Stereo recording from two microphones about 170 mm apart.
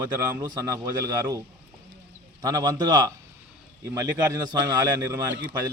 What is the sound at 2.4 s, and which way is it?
A man's voice, 20° right (ahead or behind).